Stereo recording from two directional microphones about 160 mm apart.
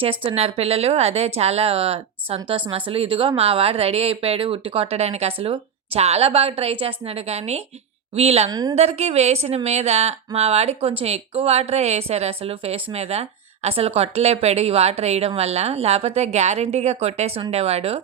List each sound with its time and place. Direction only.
0.0 s a woman's voice: 35° right (ahead or behind)
8.4 s a woman's voice: 25° right (ahead or behind)
8.7 s a woman's voice: 40° right (ahead or behind)